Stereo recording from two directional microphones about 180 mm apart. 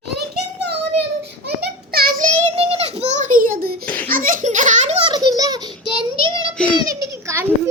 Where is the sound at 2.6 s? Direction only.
35° right (ahead or behind); by 3.8 s 55° right (ahead or behind).